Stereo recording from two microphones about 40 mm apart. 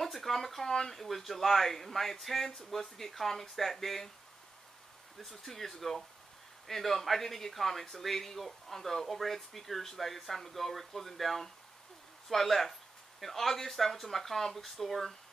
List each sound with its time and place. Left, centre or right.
0.0 s speech: centre
5.2 s speech: centre